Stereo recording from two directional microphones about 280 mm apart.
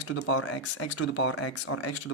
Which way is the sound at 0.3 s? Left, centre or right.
Left.